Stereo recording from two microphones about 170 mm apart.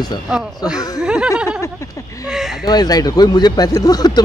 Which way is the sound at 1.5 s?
15° left (ahead or behind).